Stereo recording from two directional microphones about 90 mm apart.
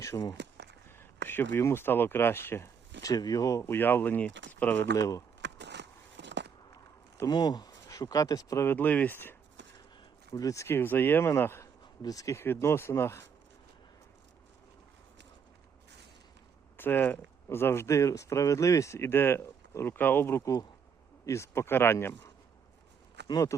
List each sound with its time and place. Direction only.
0.1 s speech: 45° left (ahead or behind)
0.9 s speech: 25° left (ahead or behind)
3.0 s speech: 40° left (ahead or behind); by 4.9 s 20° left (ahead or behind)
4.9 s speech: 40° left (ahead or behind)
7.3 s speech: 50° left (ahead or behind)
8.6 s speech: 20° left (ahead or behind)
10.3 s speech: 40° left (ahead or behind)
12.0 s speech: 40° left (ahead or behind)
12.4 s speech: 25° left (ahead or behind)
16.7 s speech: 20° left (ahead or behind)
23.2 s speech: 50° left (ahead or behind)